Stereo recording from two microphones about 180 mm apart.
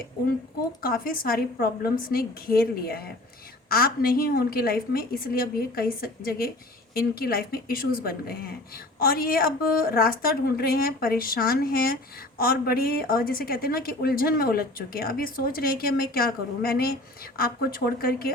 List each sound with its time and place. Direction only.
0.8 s a woman's voice: 55° left (ahead or behind)